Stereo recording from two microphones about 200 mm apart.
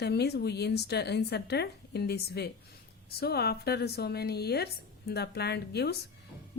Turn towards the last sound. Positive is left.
turn(degrees=55)  # may be behind; listen again after turning